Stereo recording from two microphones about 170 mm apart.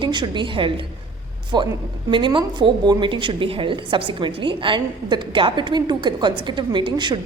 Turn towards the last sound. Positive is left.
turn(degrees=-25)  # may be behind; listen again after turning